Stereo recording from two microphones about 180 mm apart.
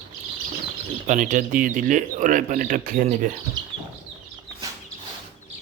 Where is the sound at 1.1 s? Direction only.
45° right (ahead or behind).